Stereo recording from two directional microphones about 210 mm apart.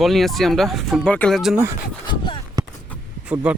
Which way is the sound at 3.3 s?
5° right (ahead or behind).